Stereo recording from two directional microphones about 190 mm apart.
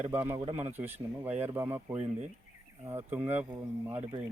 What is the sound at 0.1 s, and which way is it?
Speech, 10° right (ahead or behind).